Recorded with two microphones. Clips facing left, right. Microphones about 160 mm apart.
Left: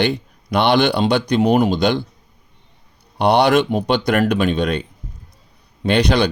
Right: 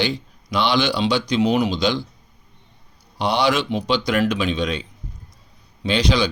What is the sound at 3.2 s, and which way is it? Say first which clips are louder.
Speech: left 6 dB; 60° left (ahead or behind).